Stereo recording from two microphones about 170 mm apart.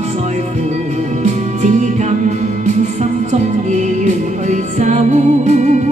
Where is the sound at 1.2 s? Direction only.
45° right (ahead or behind).